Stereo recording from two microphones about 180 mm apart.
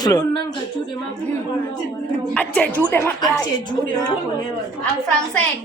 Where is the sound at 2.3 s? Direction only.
5° left (ahead or behind); by 4.1 s 20° left (ahead or behind).